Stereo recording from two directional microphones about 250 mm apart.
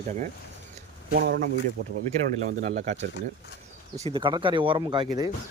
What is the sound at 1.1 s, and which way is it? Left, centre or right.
Speech, right.